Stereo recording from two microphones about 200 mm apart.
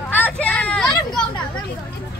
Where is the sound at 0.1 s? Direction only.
10° left (ahead or behind).